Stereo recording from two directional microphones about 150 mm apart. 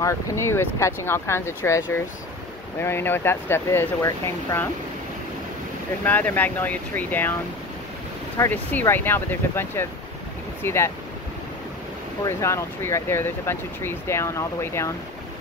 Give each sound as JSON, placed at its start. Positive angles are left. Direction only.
{"t": 0.0, "sound": "speech", "side_deg": 20}
{"t": 6.0, "sound": "speech", "side_deg": 10}
{"t": 8.4, "sound": "speech", "side_deg": 15}
{"t": 12.3, "sound": "speech", "side_deg": 20}